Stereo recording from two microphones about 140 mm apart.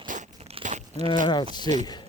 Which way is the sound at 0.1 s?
65° right (ahead or behind).